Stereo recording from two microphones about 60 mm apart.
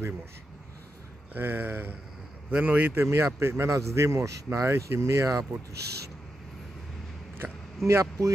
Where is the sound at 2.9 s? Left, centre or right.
Right.